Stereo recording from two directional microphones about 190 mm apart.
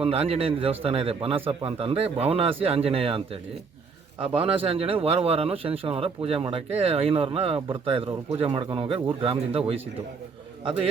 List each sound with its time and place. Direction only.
0.0 s a man's voice: 30° right (ahead or behind)
4.4 s a man's voice: 30° right (ahead or behind)